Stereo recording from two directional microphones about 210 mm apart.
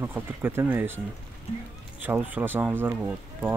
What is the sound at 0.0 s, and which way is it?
Speech, 10° right (ahead or behind).